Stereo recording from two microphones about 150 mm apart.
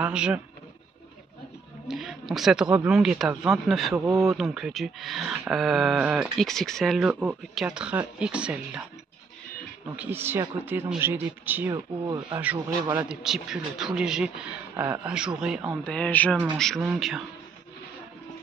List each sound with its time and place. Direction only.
0.0 s speech: 5° right (ahead or behind)
1.9 s speech: centre (ahead or behind)
3.9 s speech: 20° right (ahead or behind)
4.2 s speech: centre (ahead or behind)
9.9 s speech: 15° right (ahead or behind)
11.7 s speech: 30° right (ahead or behind)
12.9 s speech: 5° right (ahead or behind)
15.8 s speech: 10° left (ahead or behind)